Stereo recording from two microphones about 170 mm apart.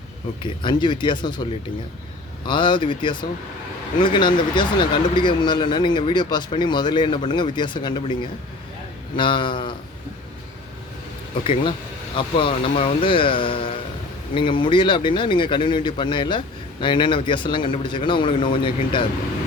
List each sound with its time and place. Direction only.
0.6 s speech: 25° left (ahead or behind)
2.5 s speech: 25° left (ahead or behind)
11.4 s speech: 30° left (ahead or behind)